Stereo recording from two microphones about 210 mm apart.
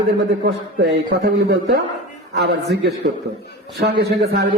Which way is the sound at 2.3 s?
55° right (ahead or behind).